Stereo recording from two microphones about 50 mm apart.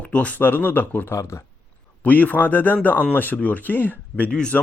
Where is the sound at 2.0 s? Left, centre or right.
Left.